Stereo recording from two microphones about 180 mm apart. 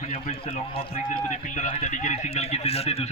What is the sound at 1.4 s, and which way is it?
A man's voice, 45° left (ahead or behind).